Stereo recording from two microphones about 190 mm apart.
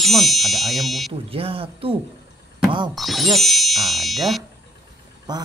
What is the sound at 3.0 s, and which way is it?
Speech, centre (ahead or behind).